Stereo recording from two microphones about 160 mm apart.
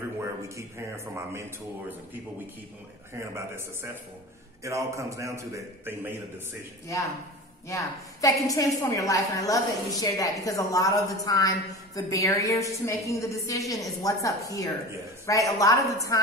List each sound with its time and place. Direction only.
0.2 s a man's voice: 15° right (ahead or behind)
3.2 s a man's voice: 15° right (ahead or behind)
7.6 s a woman's voice: 20° left (ahead or behind)